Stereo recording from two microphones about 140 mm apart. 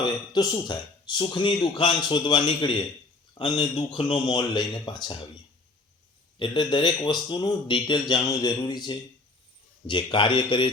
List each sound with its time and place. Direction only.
0.0 s a man's voice: 30° left (ahead or behind)
6.4 s speech: 30° left (ahead or behind)